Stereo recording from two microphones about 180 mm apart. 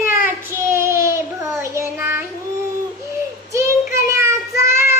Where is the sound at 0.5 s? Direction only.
15° right (ahead or behind).